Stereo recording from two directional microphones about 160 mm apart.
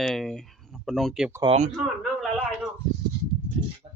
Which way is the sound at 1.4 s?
40° right (ahead or behind).